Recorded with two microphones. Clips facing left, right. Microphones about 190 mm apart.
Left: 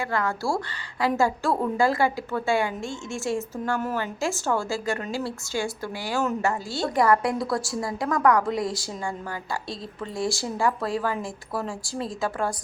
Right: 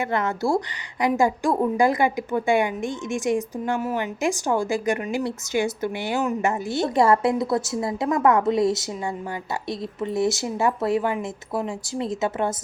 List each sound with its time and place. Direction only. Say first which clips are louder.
0.0 s a woman's voice: right 3 dB; 20° right (ahead or behind)